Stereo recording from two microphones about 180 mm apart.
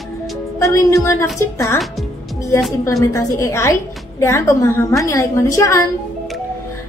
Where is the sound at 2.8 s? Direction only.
15° left (ahead or behind).